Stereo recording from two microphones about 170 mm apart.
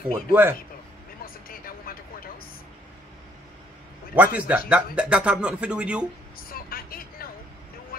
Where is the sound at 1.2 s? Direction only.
60° left (ahead or behind).